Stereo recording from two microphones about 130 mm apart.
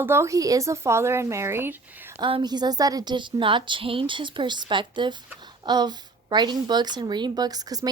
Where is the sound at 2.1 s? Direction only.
45° right (ahead or behind).